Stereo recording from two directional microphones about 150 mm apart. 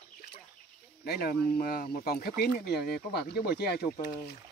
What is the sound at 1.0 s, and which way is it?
Speech, 90° left.